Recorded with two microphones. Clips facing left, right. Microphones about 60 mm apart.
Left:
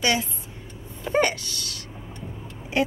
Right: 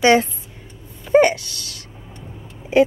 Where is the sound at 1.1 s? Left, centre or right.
Centre.